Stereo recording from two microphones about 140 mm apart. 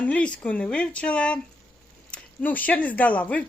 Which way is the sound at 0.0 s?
10° left (ahead or behind).